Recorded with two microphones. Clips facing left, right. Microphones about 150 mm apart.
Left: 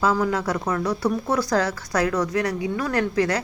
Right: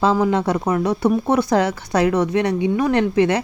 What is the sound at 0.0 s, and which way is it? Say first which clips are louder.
Speech: right 4 dB; 25° right (ahead or behind).